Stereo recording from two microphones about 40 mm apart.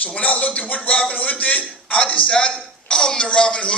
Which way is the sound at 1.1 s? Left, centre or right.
Left.